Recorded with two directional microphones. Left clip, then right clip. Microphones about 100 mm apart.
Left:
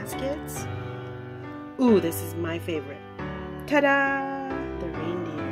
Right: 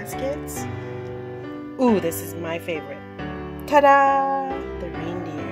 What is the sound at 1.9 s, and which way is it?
Speech, 55° right (ahead or behind).